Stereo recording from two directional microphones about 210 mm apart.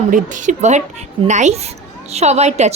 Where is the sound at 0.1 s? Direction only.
35° right (ahead or behind).